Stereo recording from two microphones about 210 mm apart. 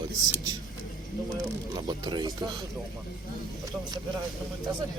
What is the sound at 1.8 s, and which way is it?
Speech, 20° right (ahead or behind).